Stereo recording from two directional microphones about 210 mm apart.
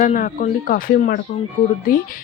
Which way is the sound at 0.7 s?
45° left (ahead or behind).